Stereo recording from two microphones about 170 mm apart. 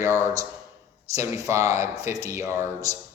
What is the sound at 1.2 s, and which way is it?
Speech, 15° right (ahead or behind).